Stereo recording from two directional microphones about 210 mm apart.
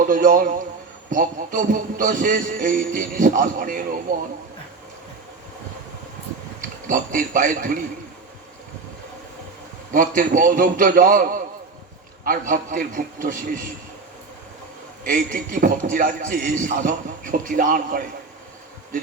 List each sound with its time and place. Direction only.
0.0 s a man's voice: 40° right (ahead or behind)
6.6 s a man's voice: 40° right (ahead or behind)
9.9 s a man's voice: 40° right (ahead or behind)
15.0 s a man's voice: 40° right (ahead or behind)